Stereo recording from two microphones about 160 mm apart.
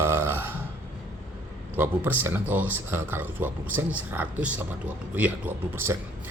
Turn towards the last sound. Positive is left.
turn(degrees=-15)  # may be behind; listen again after turning